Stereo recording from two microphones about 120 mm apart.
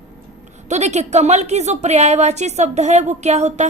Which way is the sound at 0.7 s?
70° right (ahead or behind).